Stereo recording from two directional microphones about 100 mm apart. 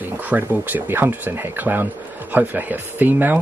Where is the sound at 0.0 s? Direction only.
20° right (ahead or behind).